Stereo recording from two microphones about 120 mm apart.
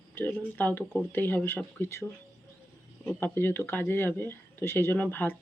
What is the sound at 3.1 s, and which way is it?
Speech, 15° left (ahead or behind).